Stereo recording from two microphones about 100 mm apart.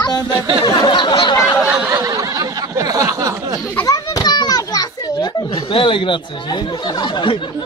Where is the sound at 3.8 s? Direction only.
35° left (ahead or behind).